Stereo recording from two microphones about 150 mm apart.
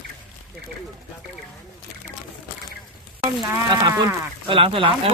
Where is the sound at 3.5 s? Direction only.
25° right (ahead or behind).